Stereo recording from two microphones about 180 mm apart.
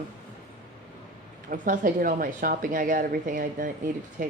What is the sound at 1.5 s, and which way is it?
A woman's voice, 45° right (ahead or behind).